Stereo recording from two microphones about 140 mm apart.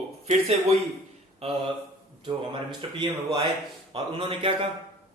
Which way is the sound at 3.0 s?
40° right (ahead or behind).